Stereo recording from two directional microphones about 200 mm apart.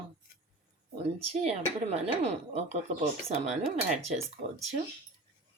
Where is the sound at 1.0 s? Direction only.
30° right (ahead or behind).